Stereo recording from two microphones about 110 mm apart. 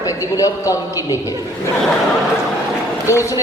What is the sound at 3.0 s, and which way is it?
Speech, 25° left (ahead or behind).